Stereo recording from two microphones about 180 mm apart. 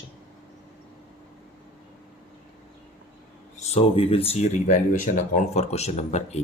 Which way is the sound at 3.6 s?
35° left (ahead or behind).